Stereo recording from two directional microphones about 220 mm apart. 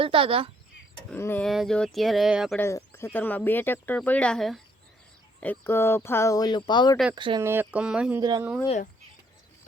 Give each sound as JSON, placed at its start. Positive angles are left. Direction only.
{"t": 0.0, "sound": "speech", "side_deg": -25}
{"t": 1.1, "sound": "speech", "side_deg": 10}
{"t": 2.6, "sound": "speech", "side_deg": 10}
{"t": 6.9, "sound": "speech", "side_deg": 0}
{"t": 7.2, "sound": "speech", "side_deg": -20}
{"t": 7.4, "sound": "speech", "side_deg": -10}
{"t": 8.2, "sound": "speech", "side_deg": -20}
{"t": 8.6, "sound": "speech", "side_deg": 30}